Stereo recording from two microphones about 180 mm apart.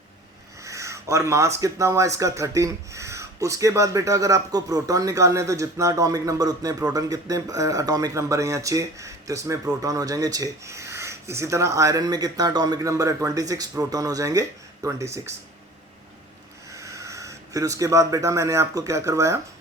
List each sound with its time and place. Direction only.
0.6 s speech: 15° right (ahead or behind)
16.7 s speech: 15° right (ahead or behind)